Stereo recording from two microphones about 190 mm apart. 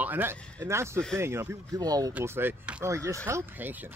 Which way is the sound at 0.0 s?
10° right (ahead or behind).